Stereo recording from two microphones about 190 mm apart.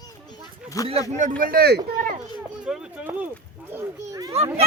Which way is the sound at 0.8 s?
15° left (ahead or behind).